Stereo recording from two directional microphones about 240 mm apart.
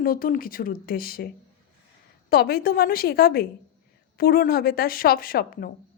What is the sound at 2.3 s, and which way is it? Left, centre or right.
Speech, left.